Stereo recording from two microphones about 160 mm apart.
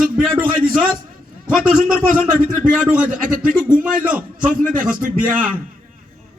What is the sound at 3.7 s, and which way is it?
Speech, 10° right (ahead or behind).